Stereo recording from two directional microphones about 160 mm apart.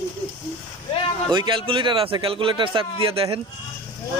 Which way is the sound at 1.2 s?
30° right (ahead or behind).